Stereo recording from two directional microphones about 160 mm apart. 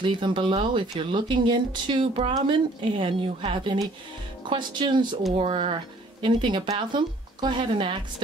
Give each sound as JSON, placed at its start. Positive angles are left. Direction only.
{"t": 0.0, "sound": "speech", "side_deg": -30}